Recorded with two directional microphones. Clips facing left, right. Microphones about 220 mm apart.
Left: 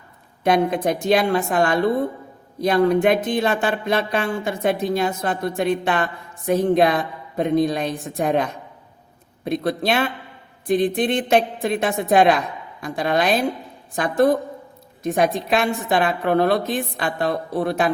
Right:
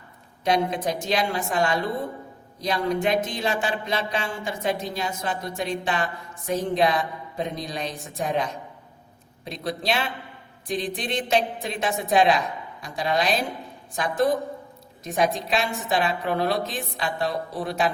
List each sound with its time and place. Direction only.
0.4 s speech: 55° left (ahead or behind)